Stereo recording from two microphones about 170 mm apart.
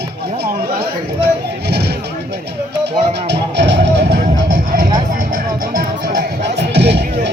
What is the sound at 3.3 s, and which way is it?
Music, 90° right.